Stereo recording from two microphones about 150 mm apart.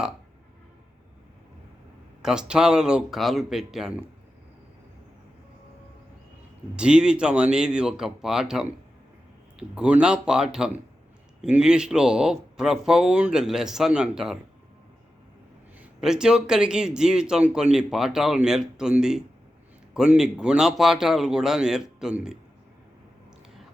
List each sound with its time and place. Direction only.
2.2 s speech: 5° right (ahead or behind)
6.7 s speech: 5° right (ahead or behind)
15.8 s speech: 5° right (ahead or behind)